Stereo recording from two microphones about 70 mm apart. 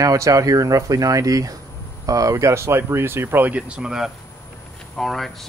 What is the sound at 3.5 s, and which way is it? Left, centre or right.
A man's voice, centre.